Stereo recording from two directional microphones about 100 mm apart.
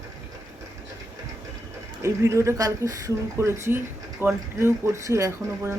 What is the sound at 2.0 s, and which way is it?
Speech, 30° right (ahead or behind).